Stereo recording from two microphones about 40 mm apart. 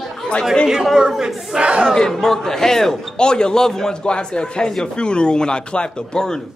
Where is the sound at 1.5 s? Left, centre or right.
Right.